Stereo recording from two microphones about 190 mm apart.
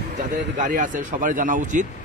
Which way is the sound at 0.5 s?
40° right (ahead or behind).